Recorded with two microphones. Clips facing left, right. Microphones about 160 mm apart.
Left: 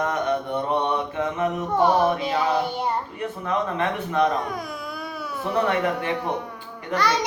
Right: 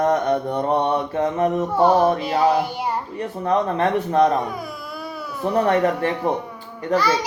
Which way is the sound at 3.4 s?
35° right (ahead or behind).